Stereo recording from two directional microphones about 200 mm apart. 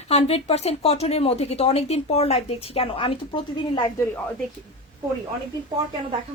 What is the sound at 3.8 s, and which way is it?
Speech, 15° left (ahead or behind).